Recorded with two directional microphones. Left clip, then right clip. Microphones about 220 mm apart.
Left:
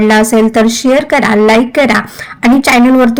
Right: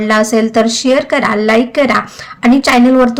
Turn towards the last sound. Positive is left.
turn(degrees=20)  # may be behind; listen again after turning